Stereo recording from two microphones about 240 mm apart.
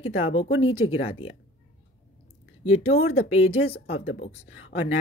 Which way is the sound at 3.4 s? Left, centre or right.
Left.